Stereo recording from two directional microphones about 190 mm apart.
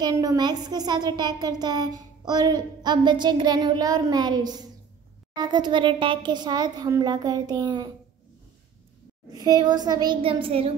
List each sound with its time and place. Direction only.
0.0 s child singing: 20° right (ahead or behind)
9.3 s child singing: 20° right (ahead or behind)